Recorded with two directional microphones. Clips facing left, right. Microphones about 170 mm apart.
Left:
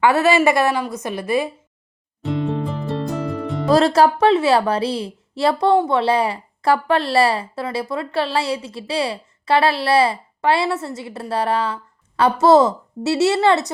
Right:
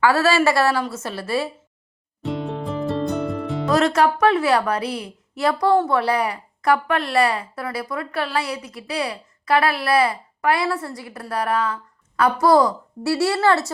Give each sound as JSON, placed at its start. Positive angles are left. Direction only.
{"t": 0.0, "sound": "a woman's voice", "side_deg": 20}
{"t": 2.2, "sound": "music", "side_deg": 0}
{"t": 3.7, "sound": "a woman's voice", "side_deg": 30}